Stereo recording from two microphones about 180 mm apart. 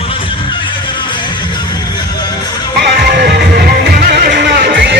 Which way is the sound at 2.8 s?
65° right (ahead or behind).